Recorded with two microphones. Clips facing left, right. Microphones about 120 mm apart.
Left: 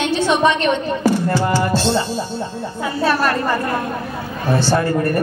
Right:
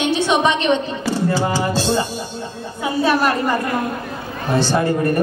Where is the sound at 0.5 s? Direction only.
45° left (ahead or behind).